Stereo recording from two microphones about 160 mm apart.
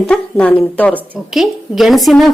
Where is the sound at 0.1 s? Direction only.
5° left (ahead or behind).